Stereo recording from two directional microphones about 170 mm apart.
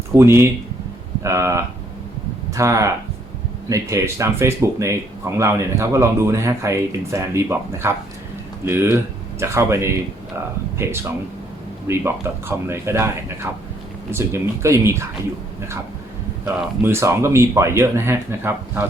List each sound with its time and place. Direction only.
0.2 s speech: 15° right (ahead or behind)
16.8 s speech: 15° right (ahead or behind)